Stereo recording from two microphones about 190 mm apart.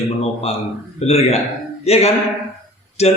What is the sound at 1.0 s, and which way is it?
Speech, 35° left (ahead or behind).